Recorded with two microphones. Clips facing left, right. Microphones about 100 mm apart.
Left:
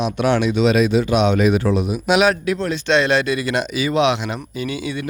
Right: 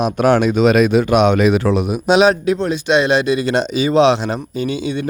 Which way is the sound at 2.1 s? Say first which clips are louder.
Right 4 dB; 25° right (ahead or behind).